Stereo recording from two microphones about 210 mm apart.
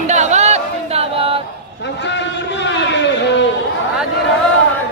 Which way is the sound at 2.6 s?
55° left (ahead or behind).